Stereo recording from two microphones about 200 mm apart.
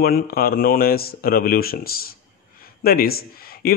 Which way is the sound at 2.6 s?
50° left (ahead or behind).